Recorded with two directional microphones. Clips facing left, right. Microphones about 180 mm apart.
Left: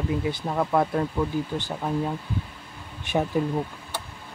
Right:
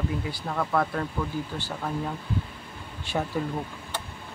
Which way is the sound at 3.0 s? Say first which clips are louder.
Left 4 dB; 20° left (ahead or behind).